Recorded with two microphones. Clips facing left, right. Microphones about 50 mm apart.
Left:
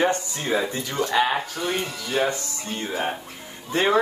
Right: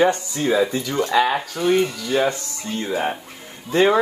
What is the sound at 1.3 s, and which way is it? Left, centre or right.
Speech, centre.